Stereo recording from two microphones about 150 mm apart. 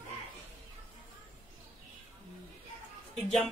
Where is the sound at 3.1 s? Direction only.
5° left (ahead or behind).